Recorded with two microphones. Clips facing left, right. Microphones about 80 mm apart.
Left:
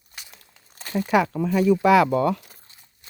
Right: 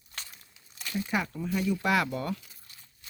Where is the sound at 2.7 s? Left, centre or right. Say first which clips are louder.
Left 1 dB; left.